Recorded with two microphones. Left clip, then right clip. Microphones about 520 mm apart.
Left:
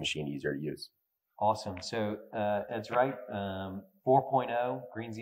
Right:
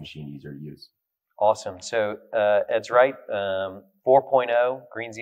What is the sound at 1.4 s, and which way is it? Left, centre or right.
Speech, right.